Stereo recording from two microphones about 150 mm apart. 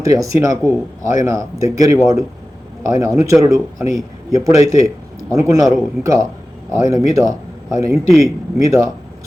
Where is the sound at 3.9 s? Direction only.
20° right (ahead or behind).